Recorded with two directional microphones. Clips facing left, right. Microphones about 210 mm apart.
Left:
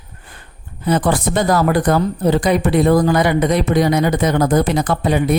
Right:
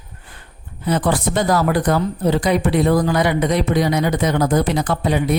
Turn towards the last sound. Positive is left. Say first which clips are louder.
# left 2 dB
turn(degrees=50)  # may be behind; listen again after turning